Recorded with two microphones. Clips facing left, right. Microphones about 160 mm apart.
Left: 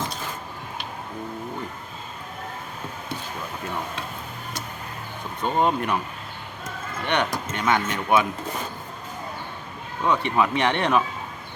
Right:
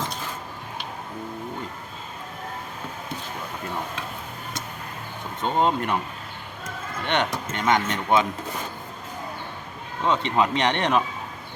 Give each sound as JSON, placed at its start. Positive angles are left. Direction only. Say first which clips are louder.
{"t": 5.4, "sound": "speech", "louder": "even", "side_deg": -20}
{"t": 7.1, "sound": "speech", "louder": "even", "side_deg": -20}
{"t": 10.0, "sound": "speech", "louder": "even", "side_deg": -20}